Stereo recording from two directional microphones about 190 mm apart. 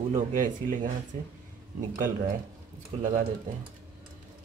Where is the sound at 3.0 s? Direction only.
35° right (ahead or behind).